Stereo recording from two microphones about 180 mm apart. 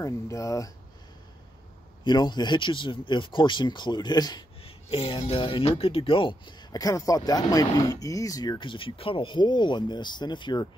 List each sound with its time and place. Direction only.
0.0 s speech: 15° left (ahead or behind)
2.0 s speech: 25° left (ahead or behind)